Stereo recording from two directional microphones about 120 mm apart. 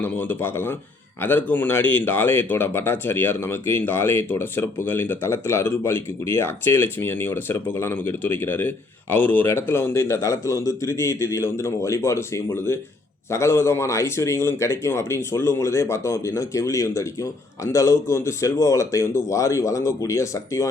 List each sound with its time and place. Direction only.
0.0 s speech: 15° left (ahead or behind)